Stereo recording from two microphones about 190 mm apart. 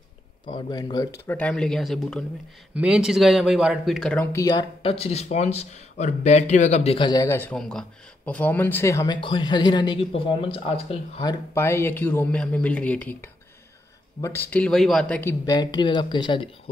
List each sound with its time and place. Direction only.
0.5 s speech: 20° left (ahead or behind)
11.5 s speech: 15° left (ahead or behind)
15.4 s speech: 20° left (ahead or behind)